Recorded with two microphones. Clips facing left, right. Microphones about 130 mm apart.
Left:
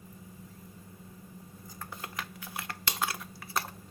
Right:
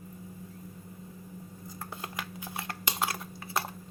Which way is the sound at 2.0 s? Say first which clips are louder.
Right 1 dB; 25° right (ahead or behind).